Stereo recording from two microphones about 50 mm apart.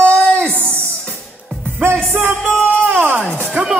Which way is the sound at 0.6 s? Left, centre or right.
Right.